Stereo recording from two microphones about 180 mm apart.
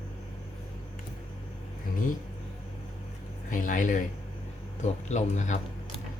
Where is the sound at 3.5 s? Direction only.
45° left (ahead or behind).